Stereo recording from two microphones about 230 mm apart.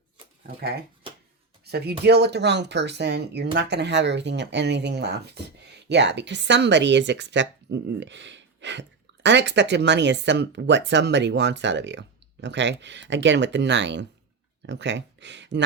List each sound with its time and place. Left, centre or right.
1.6 s speech: right